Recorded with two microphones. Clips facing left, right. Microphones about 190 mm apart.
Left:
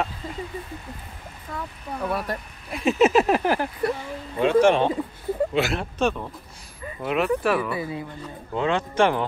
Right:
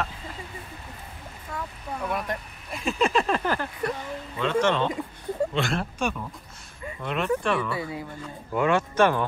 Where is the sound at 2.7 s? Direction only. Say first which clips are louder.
Left 6 dB; centre (ahead or behind).